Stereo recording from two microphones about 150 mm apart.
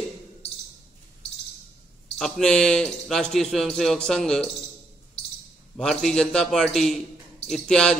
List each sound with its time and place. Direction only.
2.1 s a man's voice: centre (ahead or behind)
5.8 s a man's voice: 5° left (ahead or behind)